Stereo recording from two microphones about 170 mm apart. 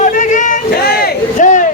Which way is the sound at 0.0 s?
50° left (ahead or behind).